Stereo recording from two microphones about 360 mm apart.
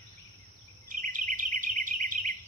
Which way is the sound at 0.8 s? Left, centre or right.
Right.